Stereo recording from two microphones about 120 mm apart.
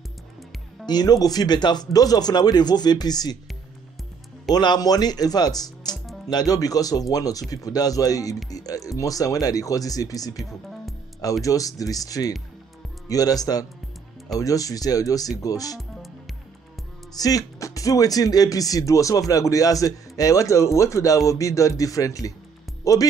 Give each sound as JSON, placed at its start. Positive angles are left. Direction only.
{"t": 0.8, "sound": "speech", "side_deg": 35}
{"t": 4.5, "sound": "speech", "side_deg": 35}
{"t": 11.4, "sound": "speech", "side_deg": 30}
{"t": 17.1, "sound": "speech", "side_deg": 30}